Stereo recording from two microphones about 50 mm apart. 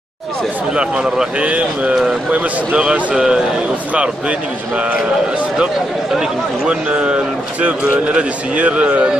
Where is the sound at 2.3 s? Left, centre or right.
Right.